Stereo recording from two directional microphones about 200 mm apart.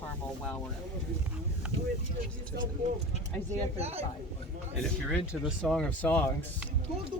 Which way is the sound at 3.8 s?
30° right (ahead or behind).